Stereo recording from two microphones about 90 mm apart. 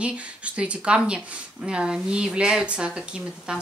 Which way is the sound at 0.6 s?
10° right (ahead or behind).